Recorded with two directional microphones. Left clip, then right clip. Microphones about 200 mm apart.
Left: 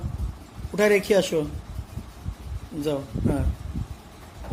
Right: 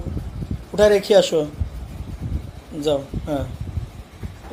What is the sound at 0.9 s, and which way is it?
Speech, 50° left (ahead or behind).